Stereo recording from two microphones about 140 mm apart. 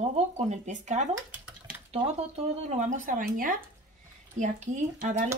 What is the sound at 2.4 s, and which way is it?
Speech, 55° right (ahead or behind).